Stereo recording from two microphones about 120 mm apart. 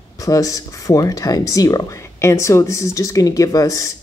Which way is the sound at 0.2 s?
30° left (ahead or behind).